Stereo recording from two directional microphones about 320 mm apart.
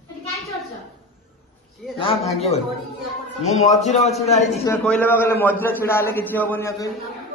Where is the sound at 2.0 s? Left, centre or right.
Centre.